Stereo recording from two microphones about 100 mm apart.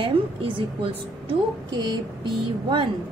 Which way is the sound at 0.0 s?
60° right (ahead or behind).